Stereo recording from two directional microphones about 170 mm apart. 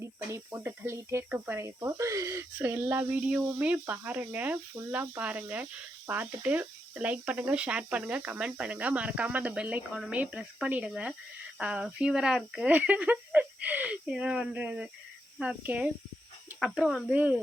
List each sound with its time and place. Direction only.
0.0 s speech: 15° right (ahead or behind)